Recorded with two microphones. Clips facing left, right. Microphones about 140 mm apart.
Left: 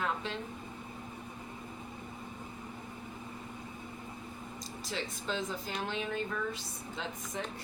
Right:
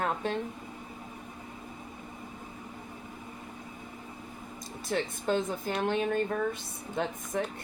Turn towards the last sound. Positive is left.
turn(degrees=-55)  # may be behind; listen again after turning